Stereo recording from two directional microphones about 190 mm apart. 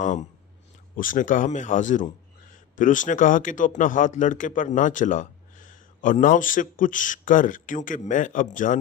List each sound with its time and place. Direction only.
0.0 s speech: 40° left (ahead or behind)